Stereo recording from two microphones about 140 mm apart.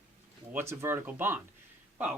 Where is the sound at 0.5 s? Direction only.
20° right (ahead or behind).